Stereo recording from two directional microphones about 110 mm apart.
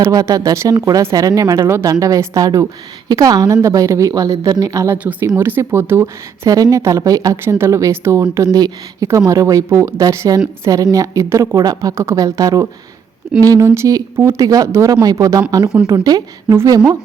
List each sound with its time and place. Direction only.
0.0 s speech: 30° right (ahead or behind)